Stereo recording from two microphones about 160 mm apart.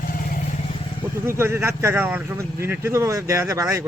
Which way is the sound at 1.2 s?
15° right (ahead or behind).